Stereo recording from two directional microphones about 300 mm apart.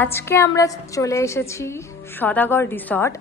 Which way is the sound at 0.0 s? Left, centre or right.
Centre.